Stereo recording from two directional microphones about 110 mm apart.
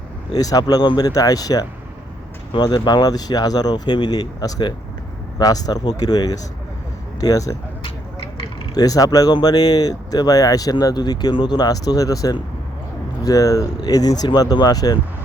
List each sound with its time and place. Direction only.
0.3 s speech: 35° left (ahead or behind)
8.7 s speech: 35° left (ahead or behind)